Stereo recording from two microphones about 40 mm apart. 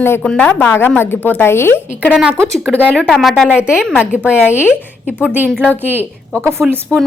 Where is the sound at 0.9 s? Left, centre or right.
Left.